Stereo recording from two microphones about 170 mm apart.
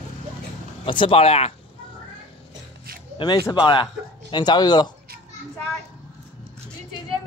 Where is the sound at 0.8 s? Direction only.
30° left (ahead or behind).